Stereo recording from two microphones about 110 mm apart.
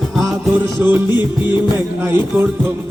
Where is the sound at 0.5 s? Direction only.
20° right (ahead or behind).